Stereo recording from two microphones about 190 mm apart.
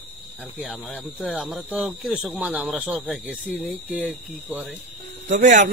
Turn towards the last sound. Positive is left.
turn(degrees=-40)  # may be behind; listen again after turning